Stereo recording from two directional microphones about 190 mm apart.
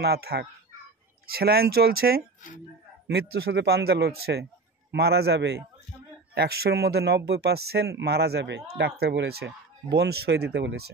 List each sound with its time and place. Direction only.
0.0 s speech: 60° right (ahead or behind)